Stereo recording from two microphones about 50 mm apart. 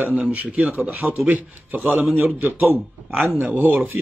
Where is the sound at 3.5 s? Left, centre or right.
Right.